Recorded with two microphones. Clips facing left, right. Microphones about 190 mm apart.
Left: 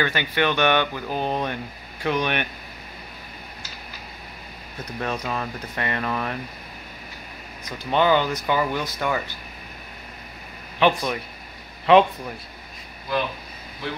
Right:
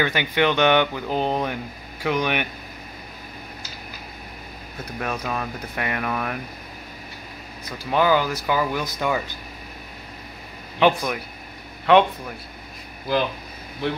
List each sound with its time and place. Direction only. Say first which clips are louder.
0.0 s speech: right 2 dB; 15° right (ahead or behind)
5.0 s speech: even; 5° right (ahead or behind)
7.9 s speech: even; 5° right (ahead or behind)
10.8 s speech: right 1 dB; 10° right (ahead or behind)